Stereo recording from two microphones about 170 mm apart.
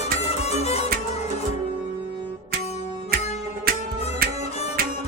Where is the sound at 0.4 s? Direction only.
40° left (ahead or behind).